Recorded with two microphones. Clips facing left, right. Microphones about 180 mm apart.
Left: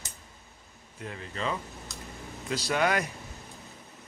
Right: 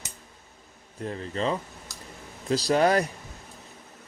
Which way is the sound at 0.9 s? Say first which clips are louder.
Right 7 dB; 35° right (ahead or behind).